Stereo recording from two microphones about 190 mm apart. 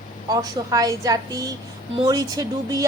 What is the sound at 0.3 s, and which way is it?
Child singing, 20° right (ahead or behind).